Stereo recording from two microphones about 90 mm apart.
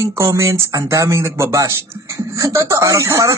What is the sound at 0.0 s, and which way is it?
Speech, 35° right (ahead or behind).